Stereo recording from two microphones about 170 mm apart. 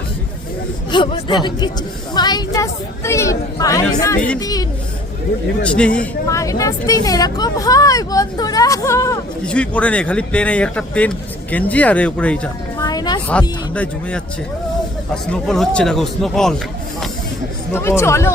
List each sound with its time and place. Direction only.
0.9 s speech: 25° left (ahead or behind)
5.6 s speech: 5° left (ahead or behind)
6.2 s speech: 20° left (ahead or behind)
9.5 s speech: 5° left (ahead or behind)
12.8 s a sound: 25° left (ahead or behind)
13.7 s speech: 10° left (ahead or behind)
17.7 s speech: 15° left (ahead or behind)